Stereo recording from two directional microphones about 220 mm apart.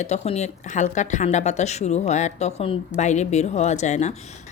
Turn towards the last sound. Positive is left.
turn(degrees=30)  # may be behind; listen again after turning